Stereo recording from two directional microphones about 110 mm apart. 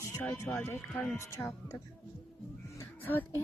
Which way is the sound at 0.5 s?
20° left (ahead or behind).